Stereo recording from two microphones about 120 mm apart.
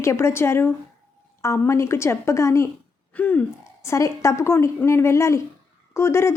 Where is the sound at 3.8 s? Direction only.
25° left (ahead or behind).